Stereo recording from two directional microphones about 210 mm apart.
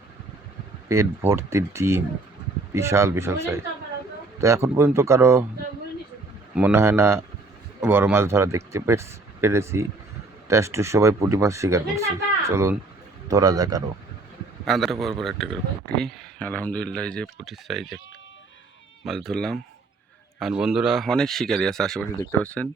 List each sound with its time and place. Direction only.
0.9 s speech: 15° right (ahead or behind)
6.5 s speech: 10° right (ahead or behind)
14.6 s a man's voice: centre (ahead or behind)
19.0 s speech: centre (ahead or behind)